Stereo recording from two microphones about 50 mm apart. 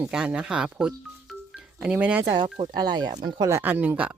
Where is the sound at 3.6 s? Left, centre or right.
Right.